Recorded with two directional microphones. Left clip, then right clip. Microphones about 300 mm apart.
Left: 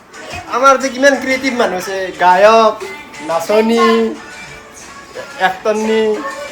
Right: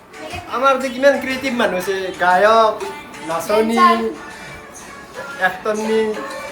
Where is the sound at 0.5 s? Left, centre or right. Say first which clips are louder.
Left 6 dB; left.